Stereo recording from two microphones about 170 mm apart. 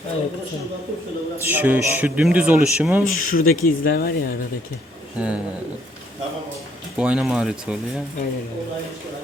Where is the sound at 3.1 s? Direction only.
55° left (ahead or behind).